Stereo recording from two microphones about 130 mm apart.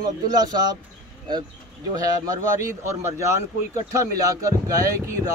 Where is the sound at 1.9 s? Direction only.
25° right (ahead or behind).